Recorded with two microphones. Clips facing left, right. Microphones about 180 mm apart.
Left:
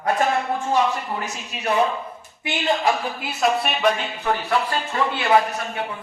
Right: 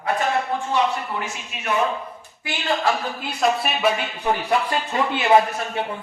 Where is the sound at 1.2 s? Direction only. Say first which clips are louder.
Left 2 dB; 35° left (ahead or behind).